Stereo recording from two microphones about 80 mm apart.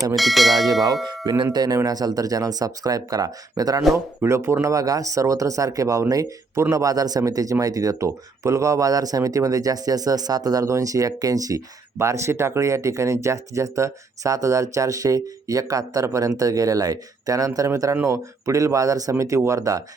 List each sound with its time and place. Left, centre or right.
0.2 s speech: centre
0.7 s speech: right
1.0 s speech: right
1.5 s speech: right
3.9 s speech: right
4.6 s speech: right